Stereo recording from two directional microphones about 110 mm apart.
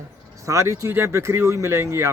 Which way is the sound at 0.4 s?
30° right (ahead or behind).